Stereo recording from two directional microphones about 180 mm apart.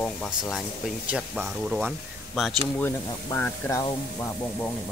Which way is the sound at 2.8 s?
10° left (ahead or behind).